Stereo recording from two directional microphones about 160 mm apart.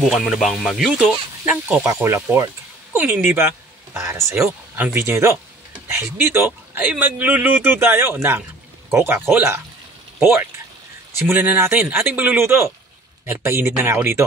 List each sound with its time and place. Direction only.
0.0 s a man's voice: centre (ahead or behind)
11.1 s a man's voice: 10° right (ahead or behind)